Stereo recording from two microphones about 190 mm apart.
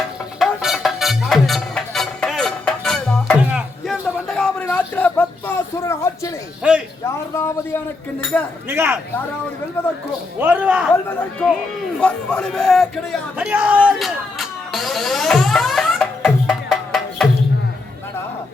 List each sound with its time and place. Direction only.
0.3 s music: centre (ahead or behind); by 6.3 s 15° left (ahead or behind)
6.6 s a man's voice: 5° right (ahead or behind)
7.1 s a man's voice: 15° left (ahead or behind)
8.7 s speech: 10° right (ahead or behind)
10.4 s speech: 5° right (ahead or behind)
11.9 s a sound: 5° left (ahead or behind)